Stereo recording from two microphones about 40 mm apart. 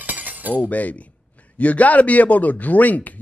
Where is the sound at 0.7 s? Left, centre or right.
Left.